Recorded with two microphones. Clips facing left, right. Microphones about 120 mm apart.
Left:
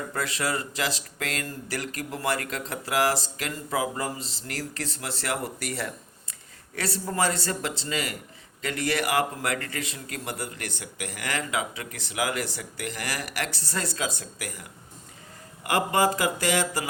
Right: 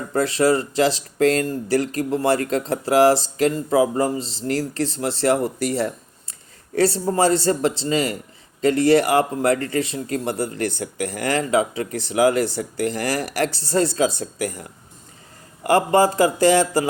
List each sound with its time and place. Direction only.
0.1 s speech: 30° right (ahead or behind)